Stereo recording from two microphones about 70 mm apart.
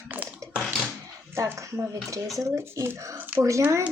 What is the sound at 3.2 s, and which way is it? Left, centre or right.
Speech, right.